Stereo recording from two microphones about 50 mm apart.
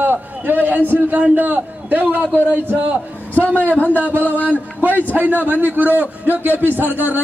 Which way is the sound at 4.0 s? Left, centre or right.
Right.